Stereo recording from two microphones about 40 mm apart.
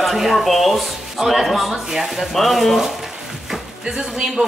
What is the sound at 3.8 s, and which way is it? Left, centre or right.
Speech, centre.